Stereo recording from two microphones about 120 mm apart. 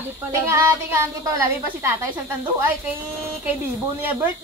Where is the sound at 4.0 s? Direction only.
15° right (ahead or behind).